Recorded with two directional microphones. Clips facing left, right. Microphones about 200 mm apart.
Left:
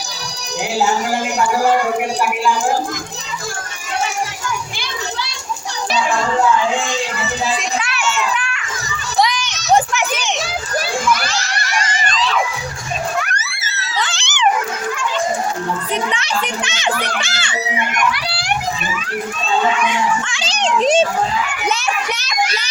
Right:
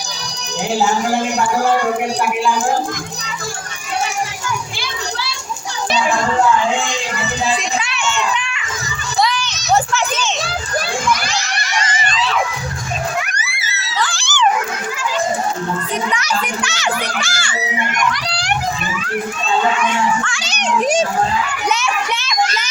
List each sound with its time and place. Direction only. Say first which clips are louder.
7.8 s children playing: even; centre (ahead or behind)
9.2 s children playing: even; 15° left (ahead or behind)
12.0 s crowd: left 1 dB; 5° right (ahead or behind)
14.0 s dog: right 1 dB; 20° left (ahead or behind)
16.1 s a child's voice: right 1 dB; 25° left (ahead or behind)
17.9 s a child's voice: even; 5° left (ahead or behind)
20.2 s a child's voice: left 2 dB; 25° left (ahead or behind)
21.7 s children playing: right 1 dB; 35° left (ahead or behind)